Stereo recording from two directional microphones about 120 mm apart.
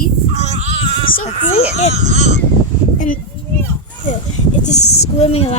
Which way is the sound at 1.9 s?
70° right (ahead or behind).